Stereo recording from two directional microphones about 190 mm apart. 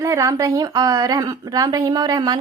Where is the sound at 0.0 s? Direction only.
15° right (ahead or behind).